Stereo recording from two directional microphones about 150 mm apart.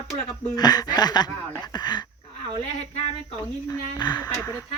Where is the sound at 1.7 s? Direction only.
30° left (ahead or behind).